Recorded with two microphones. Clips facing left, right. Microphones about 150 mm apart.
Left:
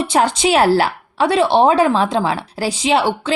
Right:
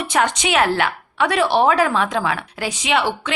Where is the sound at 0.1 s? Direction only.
35° left (ahead or behind).